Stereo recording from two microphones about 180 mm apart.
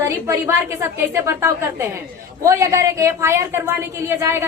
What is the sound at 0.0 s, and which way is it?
A woman's voice, 15° right (ahead or behind).